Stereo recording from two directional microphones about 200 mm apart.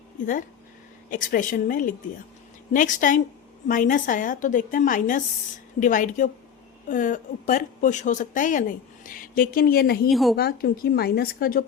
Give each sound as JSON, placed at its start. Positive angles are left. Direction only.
{"t": 1.1, "sound": "a woman's voice", "side_deg": 40}
{"t": 10.1, "sound": "a woman's voice", "side_deg": 0}
{"t": 10.3, "sound": "a woman's voice", "side_deg": 50}